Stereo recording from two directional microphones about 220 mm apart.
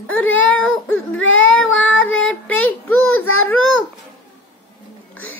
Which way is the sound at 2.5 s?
70° left (ahead or behind).